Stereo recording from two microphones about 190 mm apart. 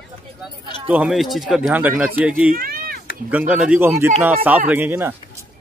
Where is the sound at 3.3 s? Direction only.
5° right (ahead or behind).